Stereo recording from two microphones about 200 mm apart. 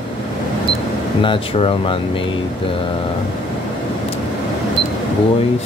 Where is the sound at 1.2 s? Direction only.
25° left (ahead or behind).